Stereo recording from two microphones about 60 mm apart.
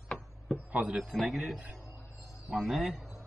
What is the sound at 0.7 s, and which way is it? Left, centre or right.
Speech, centre.